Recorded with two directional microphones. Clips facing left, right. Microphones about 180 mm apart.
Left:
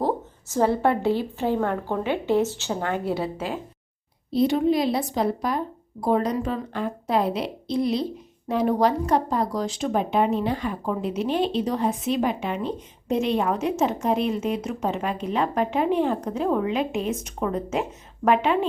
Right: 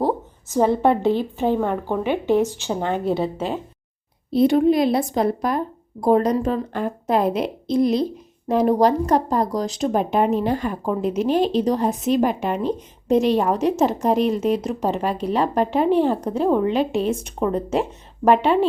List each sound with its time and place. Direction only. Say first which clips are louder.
0.0 s a woman's voice: right 3 dB; 15° right (ahead or behind)
4.3 s a woman's voice: right 4 dB; 55° right (ahead or behind); by 18.7 s 35° right (ahead or behind)